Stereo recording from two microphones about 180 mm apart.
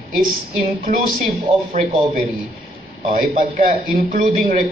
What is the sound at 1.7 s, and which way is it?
A man's voice, 45° right (ahead or behind).